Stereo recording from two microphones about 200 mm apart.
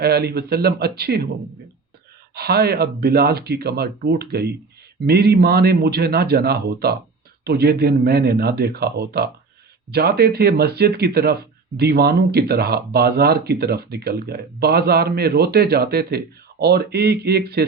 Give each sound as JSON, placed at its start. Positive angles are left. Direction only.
{"t": 0.0, "sound": "speech", "side_deg": -55}
{"t": 2.3, "sound": "speech", "side_deg": -50}